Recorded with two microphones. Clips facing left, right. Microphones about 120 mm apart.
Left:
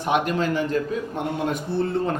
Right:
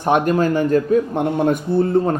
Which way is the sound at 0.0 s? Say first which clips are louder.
Right 6 dB; 45° right (ahead or behind).